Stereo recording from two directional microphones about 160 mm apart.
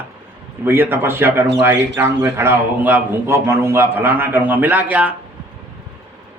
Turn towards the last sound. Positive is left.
turn(degrees=-10)  # may be behind; listen again after turning